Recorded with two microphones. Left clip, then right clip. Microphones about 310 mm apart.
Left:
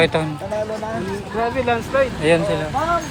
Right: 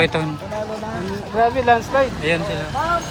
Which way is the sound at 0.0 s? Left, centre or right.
Centre.